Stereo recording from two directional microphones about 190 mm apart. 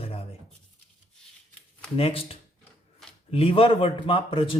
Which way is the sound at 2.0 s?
30° left (ahead or behind).